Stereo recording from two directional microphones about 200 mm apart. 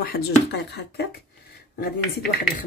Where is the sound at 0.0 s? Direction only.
50° left (ahead or behind).